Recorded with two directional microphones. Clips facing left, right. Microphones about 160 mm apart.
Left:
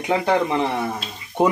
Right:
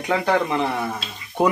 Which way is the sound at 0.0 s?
20° left (ahead or behind).